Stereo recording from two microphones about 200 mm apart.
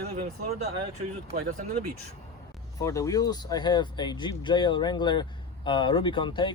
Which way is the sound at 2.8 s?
15° left (ahead or behind).